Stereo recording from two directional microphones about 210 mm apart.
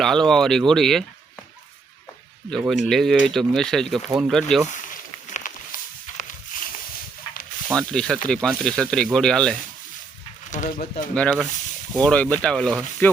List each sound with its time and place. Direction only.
0.0 s speech: centre (ahead or behind)
2.6 s speech: centre (ahead or behind)
4.7 s walk: 35° left (ahead or behind)
7.8 s speech: 5° left (ahead or behind)
10.5 s speech: 35° left (ahead or behind)
11.1 s speech: 5° left (ahead or behind)